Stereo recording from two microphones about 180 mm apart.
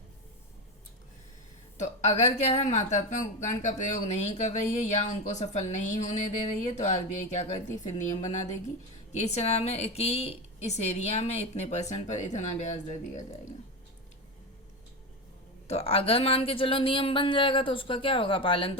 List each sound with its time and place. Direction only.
1.8 s a woman's voice: 35° left (ahead or behind)
15.6 s speech: 35° left (ahead or behind)